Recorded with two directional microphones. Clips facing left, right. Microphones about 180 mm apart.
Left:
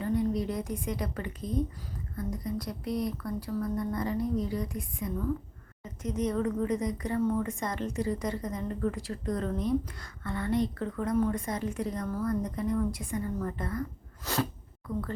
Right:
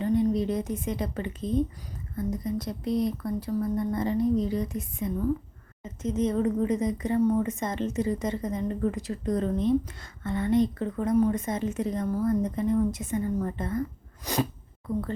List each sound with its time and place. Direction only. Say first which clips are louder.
0.0 s a woman's voice: right 4 dB; 25° right (ahead or behind)
14.3 s sneeze: right 3 dB; 15° right (ahead or behind)